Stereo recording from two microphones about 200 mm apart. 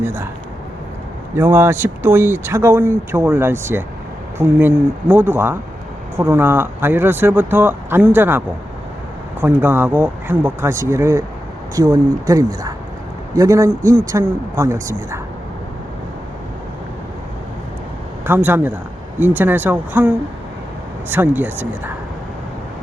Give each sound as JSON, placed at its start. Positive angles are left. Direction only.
{"t": 0.0, "sound": "speech", "side_deg": -10}
{"t": 1.4, "sound": "speech", "side_deg": -10}
{"t": 18.3, "sound": "speech", "side_deg": -10}